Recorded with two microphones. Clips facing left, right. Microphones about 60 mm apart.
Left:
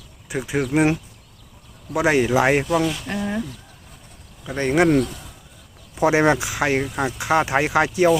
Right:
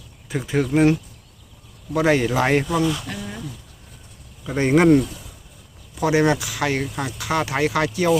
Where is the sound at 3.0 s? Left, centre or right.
Left.